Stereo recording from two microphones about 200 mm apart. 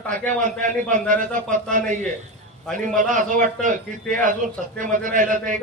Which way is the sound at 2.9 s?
40° right (ahead or behind).